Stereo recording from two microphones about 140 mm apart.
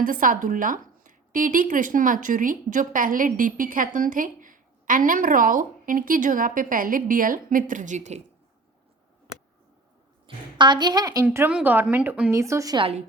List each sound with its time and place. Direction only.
0.0 s speech: 75° right (ahead or behind); by 8.2 s 55° right (ahead or behind)
10.2 s a woman's voice: 35° right (ahead or behind)
11.4 s speech: 10° right (ahead or behind)
12.3 s a woman's voice: 20° right (ahead or behind)